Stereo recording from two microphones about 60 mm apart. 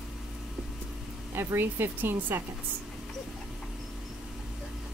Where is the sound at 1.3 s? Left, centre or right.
Right.